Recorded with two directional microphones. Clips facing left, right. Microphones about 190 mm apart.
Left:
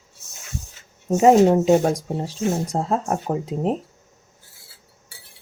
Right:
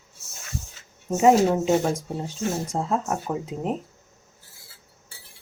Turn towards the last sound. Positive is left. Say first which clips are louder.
# left 5 dB
turn(degrees=35)  # may be behind; listen again after turning